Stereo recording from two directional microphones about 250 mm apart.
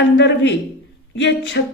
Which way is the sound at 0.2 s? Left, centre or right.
Left.